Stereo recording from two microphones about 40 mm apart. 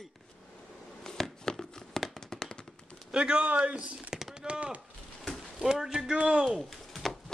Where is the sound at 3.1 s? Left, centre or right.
Right.